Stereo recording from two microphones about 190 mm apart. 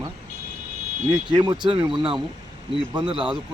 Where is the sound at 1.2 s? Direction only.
25° right (ahead or behind).